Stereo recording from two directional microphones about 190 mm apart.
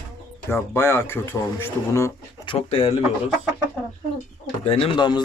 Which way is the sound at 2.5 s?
30° left (ahead or behind).